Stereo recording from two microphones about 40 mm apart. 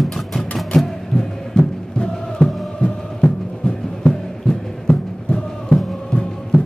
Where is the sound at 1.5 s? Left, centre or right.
Left.